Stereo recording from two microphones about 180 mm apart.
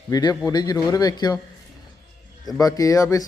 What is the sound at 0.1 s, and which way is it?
Speech, 20° left (ahead or behind).